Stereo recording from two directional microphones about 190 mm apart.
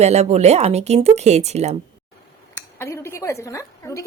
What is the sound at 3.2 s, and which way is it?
Speech, 15° left (ahead or behind).